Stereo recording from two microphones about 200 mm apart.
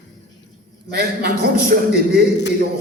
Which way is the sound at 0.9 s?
50° right (ahead or behind).